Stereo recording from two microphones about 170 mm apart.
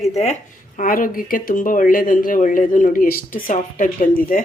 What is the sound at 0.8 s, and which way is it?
Speech, 55° left (ahead or behind).